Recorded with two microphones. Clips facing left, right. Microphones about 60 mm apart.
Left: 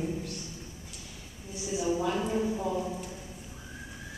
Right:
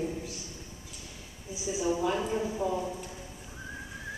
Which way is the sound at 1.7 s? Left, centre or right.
Centre.